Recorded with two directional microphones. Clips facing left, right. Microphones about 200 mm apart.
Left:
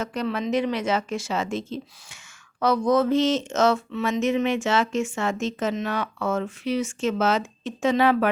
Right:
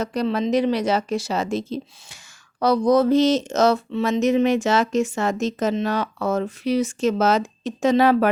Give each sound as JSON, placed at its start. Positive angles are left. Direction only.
{"t": 0.0, "sound": "speech", "side_deg": -35}